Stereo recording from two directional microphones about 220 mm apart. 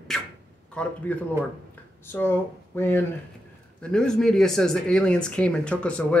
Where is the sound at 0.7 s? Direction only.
5° left (ahead or behind).